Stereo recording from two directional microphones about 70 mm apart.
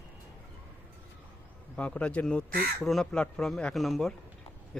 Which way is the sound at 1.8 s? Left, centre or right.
Centre.